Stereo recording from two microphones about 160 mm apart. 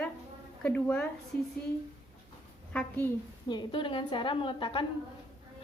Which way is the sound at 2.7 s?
10° left (ahead or behind).